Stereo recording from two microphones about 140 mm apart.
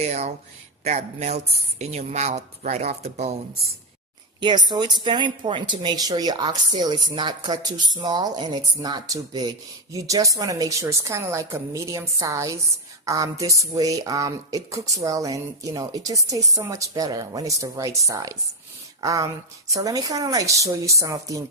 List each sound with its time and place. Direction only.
0.0 s speech: 50° right (ahead or behind)
4.4 s a woman's voice: 35° right (ahead or behind)